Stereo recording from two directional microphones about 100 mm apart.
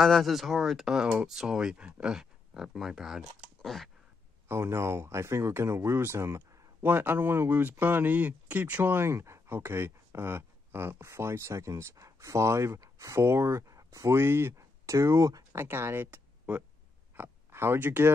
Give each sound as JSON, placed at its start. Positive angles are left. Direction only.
{"t": 0.0, "sound": "speech", "side_deg": 0}
{"t": 4.5, "sound": "speech", "side_deg": -25}